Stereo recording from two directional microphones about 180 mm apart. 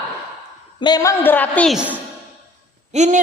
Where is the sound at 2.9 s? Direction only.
40° right (ahead or behind).